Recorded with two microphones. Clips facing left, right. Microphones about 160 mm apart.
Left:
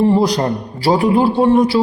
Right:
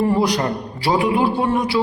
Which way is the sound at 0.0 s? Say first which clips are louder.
Left 4 dB; 30° left (ahead or behind).